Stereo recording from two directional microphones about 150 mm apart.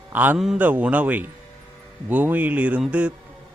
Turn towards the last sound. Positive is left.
turn(degrees=-5)  # may be behind; listen again after turning